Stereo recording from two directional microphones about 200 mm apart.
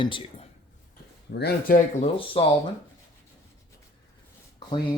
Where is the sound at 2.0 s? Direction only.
25° left (ahead or behind).